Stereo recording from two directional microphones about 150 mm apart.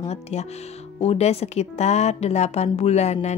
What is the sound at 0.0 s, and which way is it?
A woman's voice, 45° left (ahead or behind).